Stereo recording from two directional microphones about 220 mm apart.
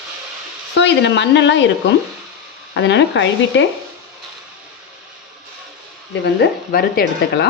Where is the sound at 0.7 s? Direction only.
55° left (ahead or behind).